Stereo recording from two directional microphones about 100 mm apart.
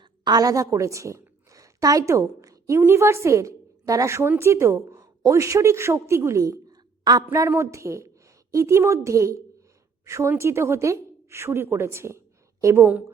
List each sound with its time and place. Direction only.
0.3 s a woman's voice: 40° right (ahead or behind)
7.3 s a woman's voice: 30° right (ahead or behind)